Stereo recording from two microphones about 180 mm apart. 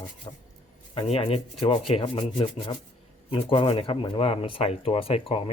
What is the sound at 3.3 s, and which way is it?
Speech, 30° left (ahead or behind).